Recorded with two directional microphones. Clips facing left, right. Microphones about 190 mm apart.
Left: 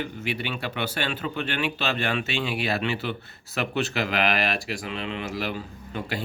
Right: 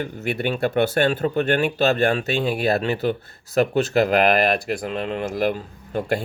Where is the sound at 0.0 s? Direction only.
50° right (ahead or behind).